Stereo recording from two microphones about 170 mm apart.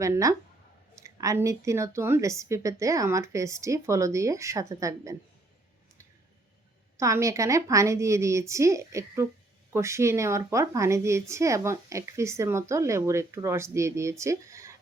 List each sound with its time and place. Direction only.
0.0 s a woman's voice: 20° right (ahead or behind)
7.0 s a woman's voice: 20° right (ahead or behind)